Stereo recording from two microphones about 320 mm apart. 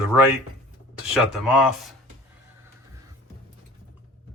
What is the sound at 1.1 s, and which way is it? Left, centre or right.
Speech, centre.